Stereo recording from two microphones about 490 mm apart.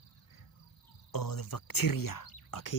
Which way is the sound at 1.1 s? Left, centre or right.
Left.